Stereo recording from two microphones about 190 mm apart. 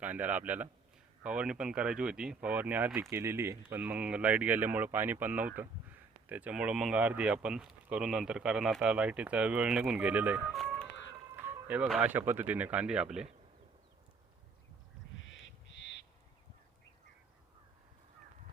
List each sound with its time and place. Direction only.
0.0 s speech: 10° right (ahead or behind)
11.3 s speech: 10° right (ahead or behind)
15.2 s crow: 75° left (ahead or behind)